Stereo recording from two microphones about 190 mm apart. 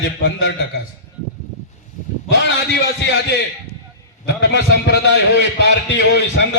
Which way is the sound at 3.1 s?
65° left (ahead or behind).